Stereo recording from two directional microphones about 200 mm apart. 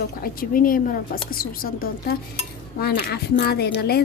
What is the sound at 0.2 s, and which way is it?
A woman's voice, 45° left (ahead or behind).